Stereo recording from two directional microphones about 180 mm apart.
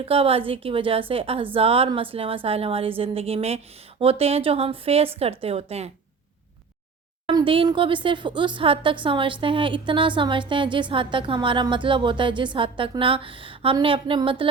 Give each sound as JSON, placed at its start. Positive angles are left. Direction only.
{"t": 0.0, "sound": "a woman's voice", "side_deg": -30}
{"t": 7.3, "sound": "speech", "side_deg": -30}